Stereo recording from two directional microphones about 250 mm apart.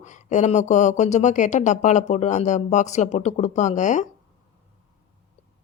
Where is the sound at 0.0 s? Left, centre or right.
Left.